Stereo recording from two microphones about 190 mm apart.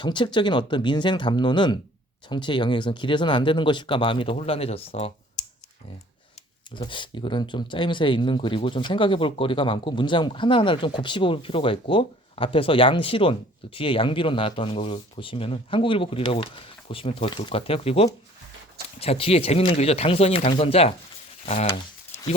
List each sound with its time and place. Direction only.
0.0 s speech: 25° left (ahead or behind)
6.7 s speech: 25° left (ahead or behind)